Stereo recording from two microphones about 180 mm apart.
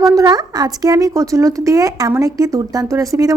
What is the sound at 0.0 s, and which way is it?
Speech, 20° right (ahead or behind).